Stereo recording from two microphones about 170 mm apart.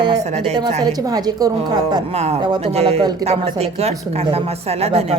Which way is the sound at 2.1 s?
40° right (ahead or behind).